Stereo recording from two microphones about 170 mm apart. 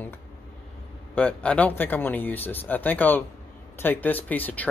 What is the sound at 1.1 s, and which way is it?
Speech, 5° left (ahead or behind).